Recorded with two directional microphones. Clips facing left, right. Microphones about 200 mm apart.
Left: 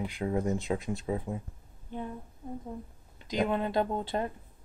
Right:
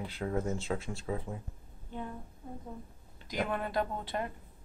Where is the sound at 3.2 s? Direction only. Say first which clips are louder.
Left 5 dB; 20° left (ahead or behind).